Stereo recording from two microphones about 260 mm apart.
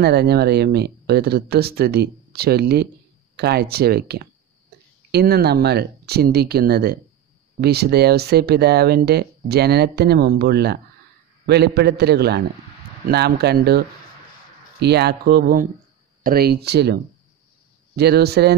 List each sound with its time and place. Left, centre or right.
0.0 s speech: right